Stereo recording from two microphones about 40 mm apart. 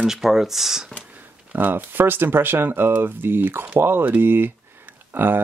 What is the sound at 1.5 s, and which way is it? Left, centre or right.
Speech, right.